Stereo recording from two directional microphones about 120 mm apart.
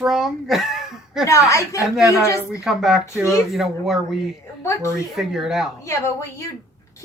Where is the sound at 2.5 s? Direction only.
5° right (ahead or behind).